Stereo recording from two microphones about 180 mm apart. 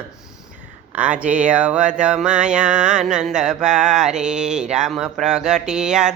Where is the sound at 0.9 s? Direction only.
10° right (ahead or behind).